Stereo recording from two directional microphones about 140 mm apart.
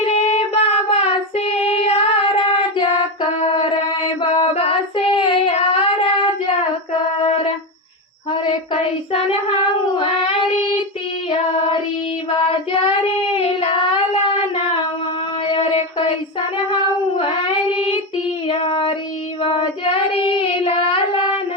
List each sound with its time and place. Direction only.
0.0 s child singing: 45° left (ahead or behind)
9.1 s child singing: 40° left (ahead or behind)
9.9 s a sound: 40° left (ahead or behind)
11.3 s child singing: 35° left (ahead or behind)
15.4 s a sound: 40° left (ahead or behind)
17.2 s singing: 40° left (ahead or behind)
18.4 s child singing: 45° left (ahead or behind)